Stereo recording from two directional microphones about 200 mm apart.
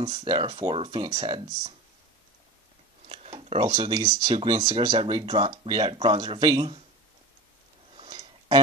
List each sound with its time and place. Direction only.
0.0 s speech: 25° right (ahead or behind)
3.1 s speech: 30° right (ahead or behind)
7.9 s a sound: 25° right (ahead or behind)